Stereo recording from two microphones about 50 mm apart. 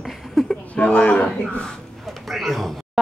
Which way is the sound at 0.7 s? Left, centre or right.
Left.